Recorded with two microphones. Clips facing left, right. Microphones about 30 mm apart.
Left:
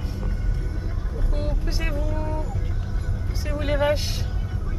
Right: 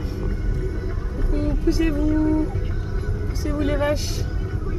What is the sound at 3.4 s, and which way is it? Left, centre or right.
Speech, left.